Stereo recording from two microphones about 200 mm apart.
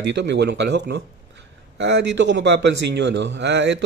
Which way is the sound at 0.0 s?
60° right (ahead or behind).